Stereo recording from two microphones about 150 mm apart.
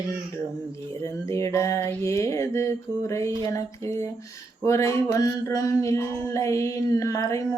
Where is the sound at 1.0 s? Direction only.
20° left (ahead or behind).